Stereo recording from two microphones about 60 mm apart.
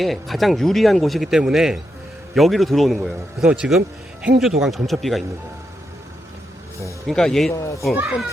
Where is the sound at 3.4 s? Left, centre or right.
Centre.